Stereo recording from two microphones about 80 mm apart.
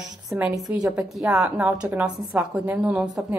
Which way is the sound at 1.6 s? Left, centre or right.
Right.